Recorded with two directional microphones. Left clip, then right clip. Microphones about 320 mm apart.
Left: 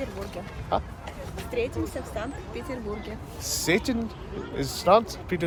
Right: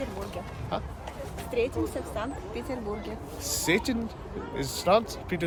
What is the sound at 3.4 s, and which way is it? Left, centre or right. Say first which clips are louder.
Speech: left 2 dB; centre.